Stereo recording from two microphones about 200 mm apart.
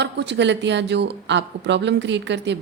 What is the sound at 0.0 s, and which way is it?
Speech, 60° right (ahead or behind).